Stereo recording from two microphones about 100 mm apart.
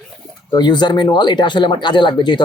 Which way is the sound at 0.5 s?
45° left (ahead or behind).